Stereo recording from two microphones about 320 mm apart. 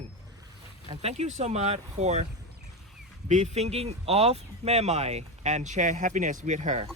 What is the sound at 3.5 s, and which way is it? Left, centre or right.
Speech, centre.